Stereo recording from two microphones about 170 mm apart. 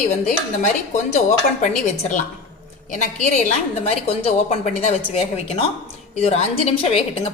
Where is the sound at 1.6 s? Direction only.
45° left (ahead or behind).